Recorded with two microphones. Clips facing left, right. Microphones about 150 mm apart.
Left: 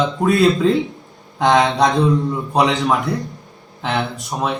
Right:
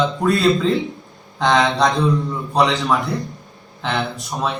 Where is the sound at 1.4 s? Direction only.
15° left (ahead or behind).